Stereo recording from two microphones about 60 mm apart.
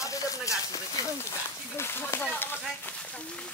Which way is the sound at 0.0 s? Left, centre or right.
Left.